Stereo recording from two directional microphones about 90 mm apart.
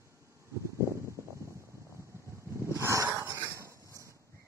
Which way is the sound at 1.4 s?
35° right (ahead or behind).